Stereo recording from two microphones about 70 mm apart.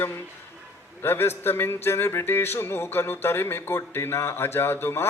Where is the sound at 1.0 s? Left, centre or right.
Left.